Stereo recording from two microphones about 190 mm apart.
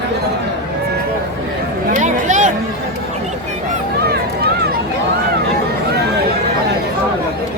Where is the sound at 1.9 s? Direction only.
40° right (ahead or behind).